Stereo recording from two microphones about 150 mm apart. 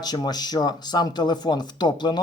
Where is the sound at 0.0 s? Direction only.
25° left (ahead or behind).